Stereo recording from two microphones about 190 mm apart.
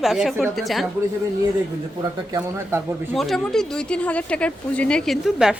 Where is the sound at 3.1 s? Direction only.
Centre (ahead or behind).